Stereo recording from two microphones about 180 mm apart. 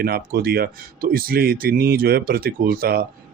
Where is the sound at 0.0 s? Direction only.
60° right (ahead or behind).